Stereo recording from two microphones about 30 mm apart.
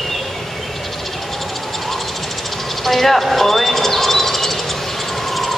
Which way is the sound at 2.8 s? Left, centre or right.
Centre.